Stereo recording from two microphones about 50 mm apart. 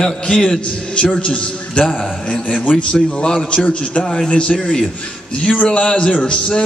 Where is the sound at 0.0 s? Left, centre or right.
Centre.